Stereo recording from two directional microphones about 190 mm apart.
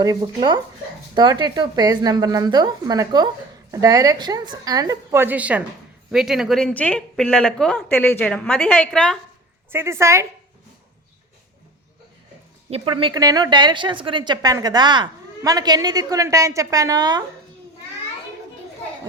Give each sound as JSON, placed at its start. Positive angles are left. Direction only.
{"t": 0.0, "sound": "a woman's voice", "side_deg": -20}
{"t": 9.7, "sound": "a woman's voice", "side_deg": -15}
{"t": 12.7, "sound": "a woman's voice", "side_deg": -30}